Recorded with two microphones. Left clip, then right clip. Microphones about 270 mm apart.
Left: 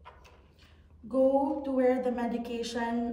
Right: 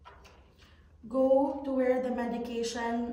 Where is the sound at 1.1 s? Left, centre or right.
Centre.